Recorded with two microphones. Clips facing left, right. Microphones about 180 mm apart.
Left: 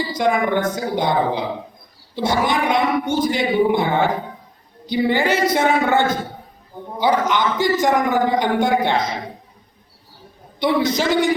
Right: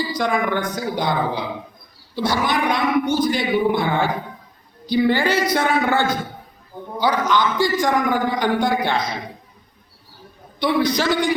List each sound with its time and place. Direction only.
0.1 s a man's voice: 25° left (ahead or behind)
10.6 s a man's voice: 20° left (ahead or behind)